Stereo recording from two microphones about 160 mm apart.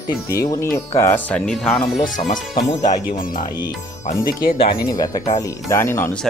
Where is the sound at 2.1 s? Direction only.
55° left (ahead or behind).